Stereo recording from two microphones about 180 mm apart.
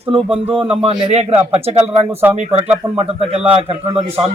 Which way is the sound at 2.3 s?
35° right (ahead or behind).